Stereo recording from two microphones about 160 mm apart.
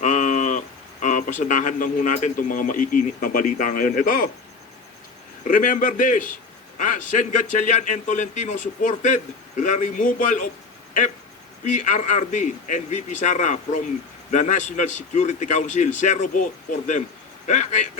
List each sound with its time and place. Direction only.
0.0 s a sound: 45° left (ahead or behind)
1.0 s speech: 50° left (ahead or behind)
5.5 s a man's voice: 55° left (ahead or behind)
11.6 s a man's voice: 50° left (ahead or behind)